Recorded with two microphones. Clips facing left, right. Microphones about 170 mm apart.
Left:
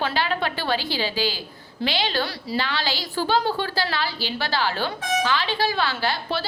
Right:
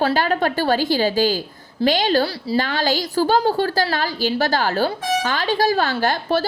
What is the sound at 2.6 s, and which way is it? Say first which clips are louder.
A woman's voice: right 7 dB; 45° right (ahead or behind).